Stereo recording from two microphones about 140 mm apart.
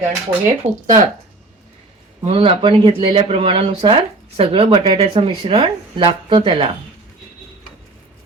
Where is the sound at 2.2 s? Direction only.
45° right (ahead or behind).